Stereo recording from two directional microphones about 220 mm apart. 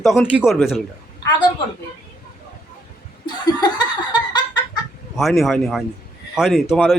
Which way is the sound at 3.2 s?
20° left (ahead or behind).